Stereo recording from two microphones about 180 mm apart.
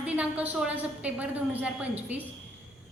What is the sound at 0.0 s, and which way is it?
A woman's voice, 10° right (ahead or behind).